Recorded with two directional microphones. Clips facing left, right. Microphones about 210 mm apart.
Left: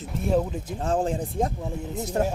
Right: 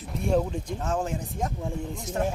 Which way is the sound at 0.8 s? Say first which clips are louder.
Left 6 dB; 30° left (ahead or behind).